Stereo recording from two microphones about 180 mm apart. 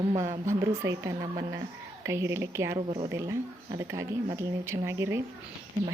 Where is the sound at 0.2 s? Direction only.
15° right (ahead or behind).